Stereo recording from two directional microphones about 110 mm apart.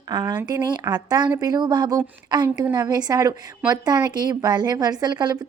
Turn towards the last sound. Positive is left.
turn(degrees=-40)  # may be behind; listen again after turning